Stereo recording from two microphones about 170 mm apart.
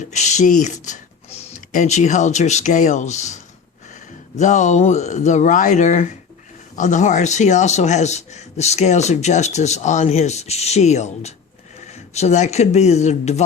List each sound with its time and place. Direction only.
0.0 s a man's voice: 45° left (ahead or behind)